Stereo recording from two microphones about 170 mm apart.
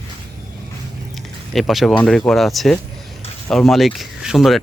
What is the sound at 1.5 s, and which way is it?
Speech, centre (ahead or behind).